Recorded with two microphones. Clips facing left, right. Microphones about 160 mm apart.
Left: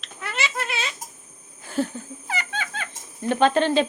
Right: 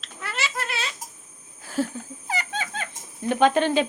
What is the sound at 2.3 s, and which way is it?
Music, 35° right (ahead or behind).